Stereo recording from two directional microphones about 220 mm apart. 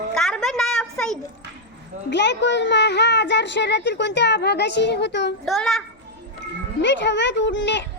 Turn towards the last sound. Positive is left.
turn(degrees=55)  # may be behind; listen again after turning